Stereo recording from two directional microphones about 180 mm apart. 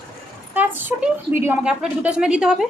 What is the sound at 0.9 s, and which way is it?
A woman's voice, 10° right (ahead or behind).